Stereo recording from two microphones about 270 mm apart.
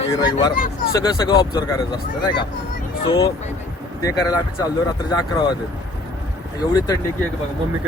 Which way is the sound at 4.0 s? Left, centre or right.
Centre.